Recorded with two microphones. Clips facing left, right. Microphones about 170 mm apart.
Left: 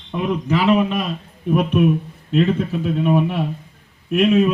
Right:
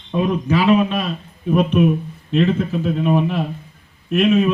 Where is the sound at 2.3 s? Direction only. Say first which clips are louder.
Even; 5° left (ahead or behind).